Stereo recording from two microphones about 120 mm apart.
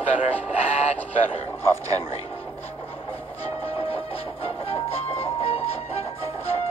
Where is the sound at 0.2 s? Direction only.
65° left (ahead or behind).